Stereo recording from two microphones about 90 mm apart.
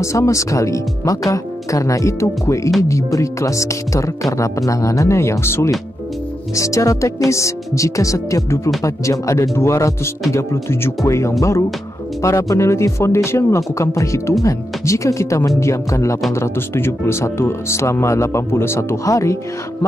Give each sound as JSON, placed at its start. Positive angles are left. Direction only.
{"t": 0.0, "sound": "speech", "side_deg": 35}